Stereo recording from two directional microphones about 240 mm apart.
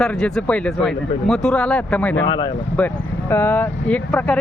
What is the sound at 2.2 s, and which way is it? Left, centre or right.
Speech, centre.